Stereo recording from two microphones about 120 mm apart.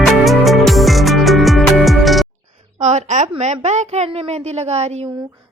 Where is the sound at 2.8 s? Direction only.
85° right.